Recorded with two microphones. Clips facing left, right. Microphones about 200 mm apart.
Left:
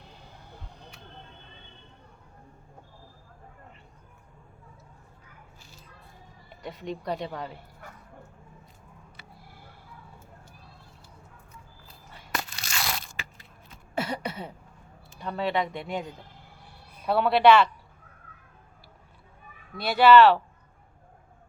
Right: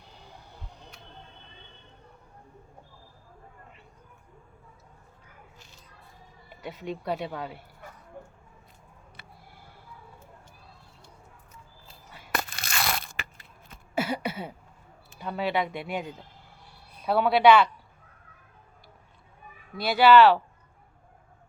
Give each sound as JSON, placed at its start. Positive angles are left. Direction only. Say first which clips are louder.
{"t": 6.6, "sound": "speech", "louder": "even", "side_deg": -5}
{"t": 12.3, "sound": "crushing", "louder": "right 2 dB", "side_deg": -55}
{"t": 13.9, "sound": "a sound", "louder": "right 2 dB", "side_deg": -5}
{"t": 15.2, "sound": "speech", "louder": "even", "side_deg": -5}
{"t": 17.1, "sound": "speech", "louder": "even", "side_deg": 0}
{"t": 19.7, "sound": "speech", "louder": "left 1 dB", "side_deg": 0}